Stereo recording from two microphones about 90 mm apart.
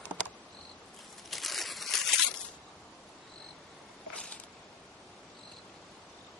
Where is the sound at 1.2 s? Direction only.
Centre (ahead or behind).